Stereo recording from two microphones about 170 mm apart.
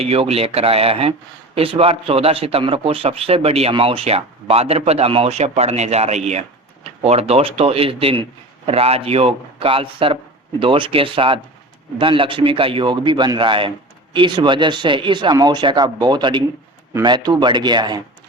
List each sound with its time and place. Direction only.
0.0 s a man's voice: 35° right (ahead or behind)